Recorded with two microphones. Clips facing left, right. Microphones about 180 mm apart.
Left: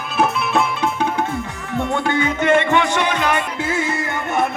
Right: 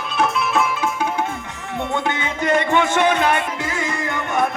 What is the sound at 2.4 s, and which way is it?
Music, 40° right (ahead or behind).